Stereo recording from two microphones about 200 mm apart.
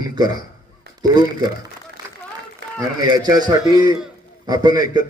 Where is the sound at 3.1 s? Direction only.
20° right (ahead or behind).